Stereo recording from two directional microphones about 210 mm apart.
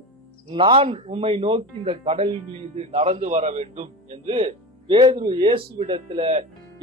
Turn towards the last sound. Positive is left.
turn(degrees=-25)  # may be behind; listen again after turning